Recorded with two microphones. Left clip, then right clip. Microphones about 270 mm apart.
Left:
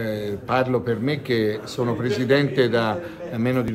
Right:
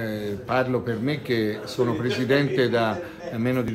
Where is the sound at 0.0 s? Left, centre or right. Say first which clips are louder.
Left 3 dB; centre.